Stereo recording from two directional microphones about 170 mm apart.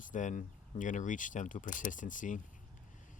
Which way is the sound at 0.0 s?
50° left (ahead or behind).